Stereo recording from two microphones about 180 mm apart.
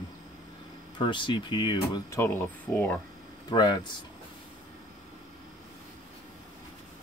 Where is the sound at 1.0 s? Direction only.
25° left (ahead or behind).